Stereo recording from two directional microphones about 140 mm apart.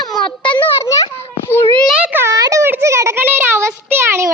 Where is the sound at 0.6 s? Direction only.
20° left (ahead or behind).